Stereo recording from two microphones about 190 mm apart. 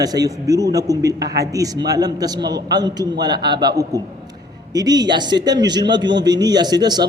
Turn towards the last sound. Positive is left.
turn(degrees=-20)  # may be behind; listen again after turning